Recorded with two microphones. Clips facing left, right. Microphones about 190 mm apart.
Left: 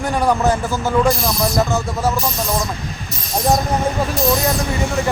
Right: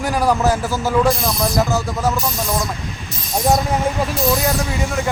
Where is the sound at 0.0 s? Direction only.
Centre (ahead or behind).